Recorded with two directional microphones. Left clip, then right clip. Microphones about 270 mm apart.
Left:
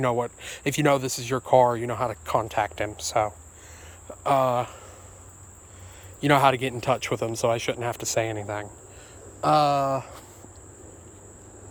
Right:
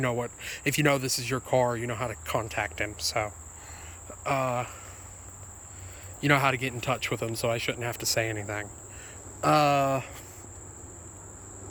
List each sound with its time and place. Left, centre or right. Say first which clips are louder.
0.0 s speech: left 5 dB; centre
6.1 s speech: left 5 dB; centre